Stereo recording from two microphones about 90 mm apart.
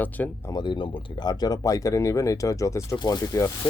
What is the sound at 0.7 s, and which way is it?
Speech, 55° left (ahead or behind).